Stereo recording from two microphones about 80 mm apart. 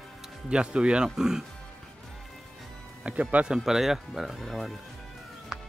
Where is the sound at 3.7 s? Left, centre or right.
Centre.